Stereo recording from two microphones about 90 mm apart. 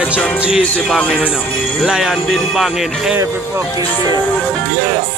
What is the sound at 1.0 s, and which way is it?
Speech, 15° left (ahead or behind).